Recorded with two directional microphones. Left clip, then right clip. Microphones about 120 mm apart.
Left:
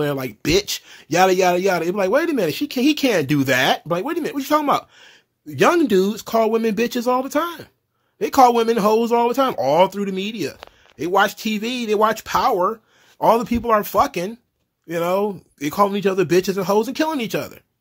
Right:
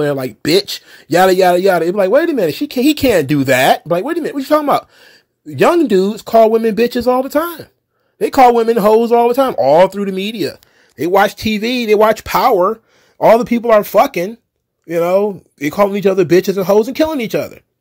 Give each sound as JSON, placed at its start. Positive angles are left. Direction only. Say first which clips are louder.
{"t": 0.0, "sound": "a man's voice", "louder": "right 6 dB", "side_deg": -15}
{"t": 11.0, "sound": "speech", "louder": "right 6 dB", "side_deg": -40}
{"t": 13.2, "sound": "a man's voice", "louder": "right 7 dB", "side_deg": -35}